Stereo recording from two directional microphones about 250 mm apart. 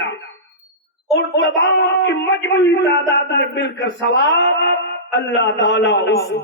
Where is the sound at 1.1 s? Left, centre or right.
Left.